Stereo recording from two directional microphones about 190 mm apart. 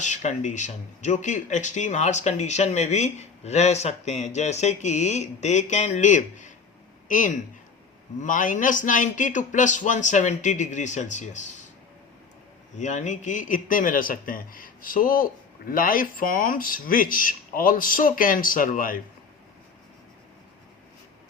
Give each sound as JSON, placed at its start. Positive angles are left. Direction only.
{"t": 0.0, "sound": "a man's voice", "side_deg": 40}
{"t": 12.7, "sound": "a man's voice", "side_deg": 40}